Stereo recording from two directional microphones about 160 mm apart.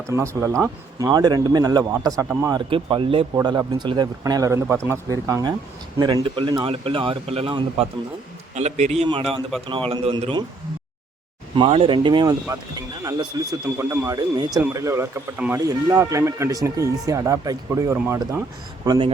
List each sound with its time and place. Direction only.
0.1 s speech: 20° right (ahead or behind); by 3.2 s 35° right (ahead or behind)
3.3 s speech: 20° right (ahead or behind)
11.5 s speech: 35° right (ahead or behind); by 18.4 s 20° right (ahead or behind)
18.9 s speech: 30° right (ahead or behind)